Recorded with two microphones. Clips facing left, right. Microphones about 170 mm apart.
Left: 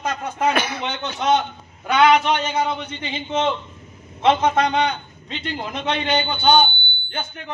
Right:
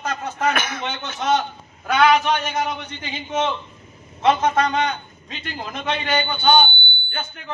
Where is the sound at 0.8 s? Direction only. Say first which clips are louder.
Left 2 dB; 20° left (ahead or behind).